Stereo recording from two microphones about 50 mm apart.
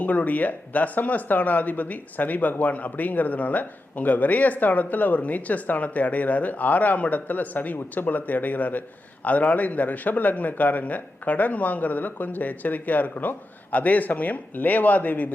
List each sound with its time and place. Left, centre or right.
0.0 s speech: left